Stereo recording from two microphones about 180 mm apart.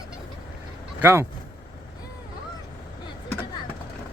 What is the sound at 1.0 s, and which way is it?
Speech, 15° right (ahead or behind).